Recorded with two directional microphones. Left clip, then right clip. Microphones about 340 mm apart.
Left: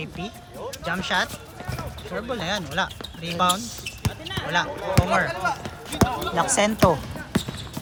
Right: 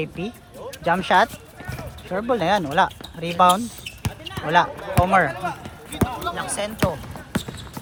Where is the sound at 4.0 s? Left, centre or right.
Centre.